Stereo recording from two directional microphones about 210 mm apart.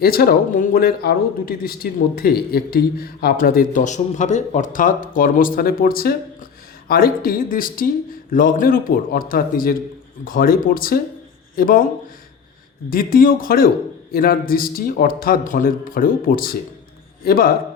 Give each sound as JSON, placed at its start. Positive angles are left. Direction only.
{"t": 0.0, "sound": "a man's voice", "side_deg": 45}
{"t": 12.9, "sound": "a man's voice", "side_deg": 45}